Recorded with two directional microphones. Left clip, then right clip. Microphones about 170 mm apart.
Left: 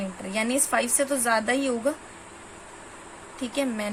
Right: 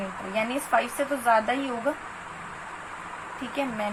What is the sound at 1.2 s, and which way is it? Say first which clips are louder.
Speech: right 4 dB; 65° left (ahead or behind).